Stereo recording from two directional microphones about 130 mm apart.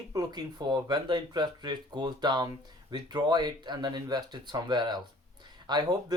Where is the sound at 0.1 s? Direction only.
30° right (ahead or behind).